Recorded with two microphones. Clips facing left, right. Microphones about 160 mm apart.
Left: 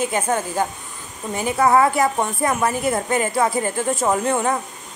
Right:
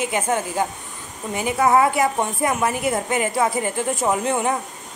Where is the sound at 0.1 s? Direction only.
20° right (ahead or behind).